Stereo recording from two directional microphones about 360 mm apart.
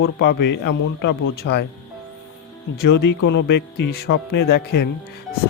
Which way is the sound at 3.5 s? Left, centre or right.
Left.